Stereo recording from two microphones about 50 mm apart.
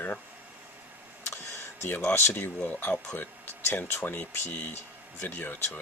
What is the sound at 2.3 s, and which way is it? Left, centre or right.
Speech, left.